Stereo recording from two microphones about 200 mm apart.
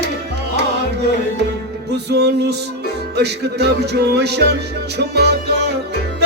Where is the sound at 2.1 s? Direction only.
55° right (ahead or behind).